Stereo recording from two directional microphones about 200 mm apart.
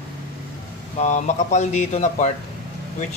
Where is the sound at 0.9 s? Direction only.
35° left (ahead or behind).